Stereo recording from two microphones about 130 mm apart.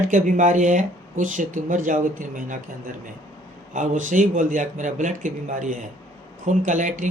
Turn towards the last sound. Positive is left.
turn(degrees=-75)  # may be behind; listen again after turning